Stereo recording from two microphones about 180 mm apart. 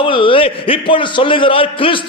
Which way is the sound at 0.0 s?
30° left (ahead or behind).